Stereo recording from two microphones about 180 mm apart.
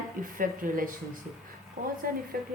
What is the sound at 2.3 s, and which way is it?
Speech, 50° right (ahead or behind).